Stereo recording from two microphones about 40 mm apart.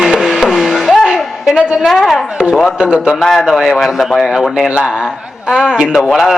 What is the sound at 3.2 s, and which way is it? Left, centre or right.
Speech, centre.